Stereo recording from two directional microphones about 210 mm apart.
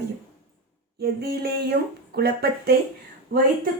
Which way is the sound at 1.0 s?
50° right (ahead or behind).